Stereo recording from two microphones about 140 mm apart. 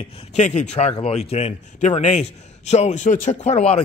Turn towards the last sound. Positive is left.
turn(degrees=45)  # may be behind; listen again after turning